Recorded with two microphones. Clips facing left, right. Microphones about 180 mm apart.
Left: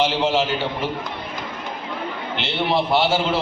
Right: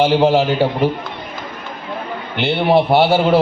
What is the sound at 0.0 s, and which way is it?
Speech, 55° right (ahead or behind).